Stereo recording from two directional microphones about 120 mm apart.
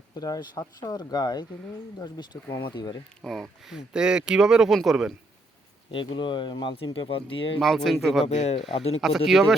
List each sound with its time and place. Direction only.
0.1 s speech: 30° left (ahead or behind)
3.2 s speech: 5° left (ahead or behind)
5.9 s speech: 45° left (ahead or behind)
7.6 s speech: centre (ahead or behind)
8.2 s speech: 60° left (ahead or behind)
9.0 s speech: centre (ahead or behind)